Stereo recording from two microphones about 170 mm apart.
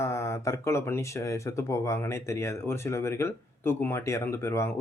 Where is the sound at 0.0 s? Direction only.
15° left (ahead or behind).